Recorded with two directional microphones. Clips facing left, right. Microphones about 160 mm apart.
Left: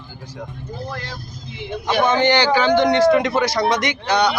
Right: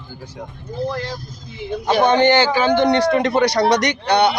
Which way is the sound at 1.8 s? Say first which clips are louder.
Right 3 dB; 40° right (ahead or behind).